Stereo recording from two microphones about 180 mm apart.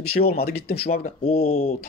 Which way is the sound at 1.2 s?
35° left (ahead or behind).